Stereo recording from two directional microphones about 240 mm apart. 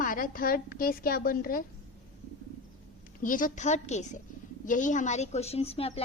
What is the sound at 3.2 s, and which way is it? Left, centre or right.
A woman's voice, left.